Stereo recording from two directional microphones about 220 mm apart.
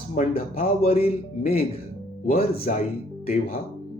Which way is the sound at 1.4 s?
40° left (ahead or behind).